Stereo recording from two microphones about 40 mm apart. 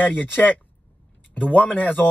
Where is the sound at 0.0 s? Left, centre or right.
Left.